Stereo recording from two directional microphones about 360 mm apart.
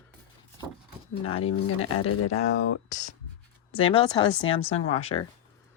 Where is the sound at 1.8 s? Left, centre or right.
Left.